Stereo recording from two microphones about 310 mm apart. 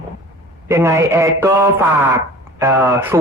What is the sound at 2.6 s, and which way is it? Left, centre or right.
Speech, centre.